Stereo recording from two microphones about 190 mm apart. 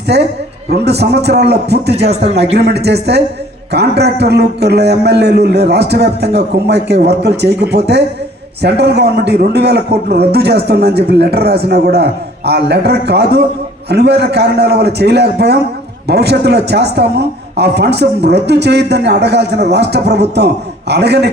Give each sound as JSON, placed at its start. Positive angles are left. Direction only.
{"t": 0.1, "sound": "a man's voice", "side_deg": -60}
{"t": 2.0, "sound": "a man's voice", "side_deg": -35}
{"t": 2.6, "sound": "a man's voice", "side_deg": -60}